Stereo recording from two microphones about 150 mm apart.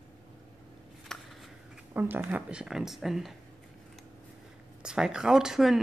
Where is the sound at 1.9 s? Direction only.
15° right (ahead or behind).